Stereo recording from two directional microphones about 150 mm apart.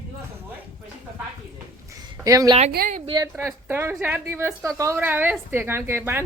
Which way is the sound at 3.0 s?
30° right (ahead or behind).